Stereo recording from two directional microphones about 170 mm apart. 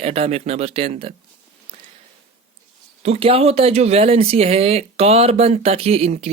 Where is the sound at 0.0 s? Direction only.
40° right (ahead or behind).